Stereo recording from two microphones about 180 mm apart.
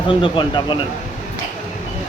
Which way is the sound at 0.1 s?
25° left (ahead or behind).